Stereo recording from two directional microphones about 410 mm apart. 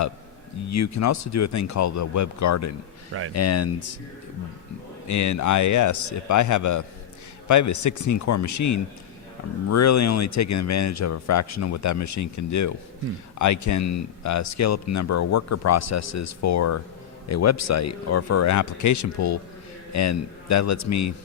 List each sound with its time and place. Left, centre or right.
0.7 s speech: left
5.0 s a man's voice: left